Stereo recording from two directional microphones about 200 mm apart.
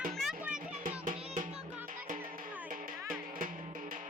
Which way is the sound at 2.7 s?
45° right (ahead or behind).